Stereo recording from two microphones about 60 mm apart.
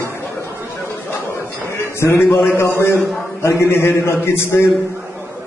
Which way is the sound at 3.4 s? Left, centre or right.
Left.